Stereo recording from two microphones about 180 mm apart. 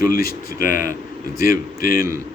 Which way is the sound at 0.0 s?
50° left (ahead or behind).